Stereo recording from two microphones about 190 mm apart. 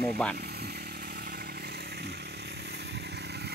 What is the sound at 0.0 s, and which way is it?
Speech, 5° left (ahead or behind).